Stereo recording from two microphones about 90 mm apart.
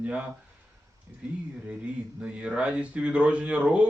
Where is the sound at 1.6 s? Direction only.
10° right (ahead or behind).